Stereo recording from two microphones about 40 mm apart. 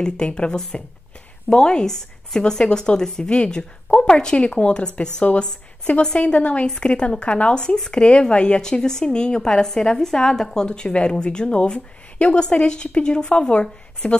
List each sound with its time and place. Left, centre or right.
0.0 s a woman's voice: left